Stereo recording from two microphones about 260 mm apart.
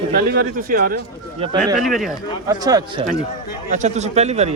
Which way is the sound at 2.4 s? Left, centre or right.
Centre.